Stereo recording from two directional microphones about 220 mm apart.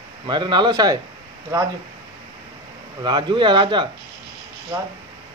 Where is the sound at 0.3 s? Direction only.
20° right (ahead or behind).